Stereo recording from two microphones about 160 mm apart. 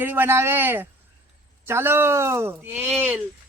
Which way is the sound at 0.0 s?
10° right (ahead or behind).